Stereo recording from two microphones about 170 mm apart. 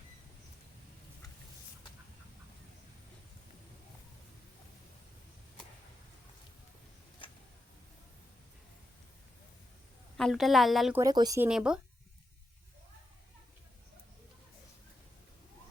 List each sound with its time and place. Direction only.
7.2 s a sound: 30° left (ahead or behind)
10.2 s a woman's voice: centre (ahead or behind)
10.9 s speech: 20° right (ahead or behind)
11.3 s a woman's voice: 5° right (ahead or behind)